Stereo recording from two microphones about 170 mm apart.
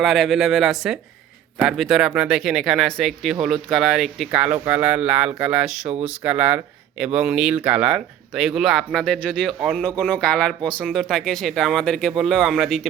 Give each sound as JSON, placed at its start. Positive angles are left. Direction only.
{"t": 0.0, "sound": "speech", "side_deg": 0}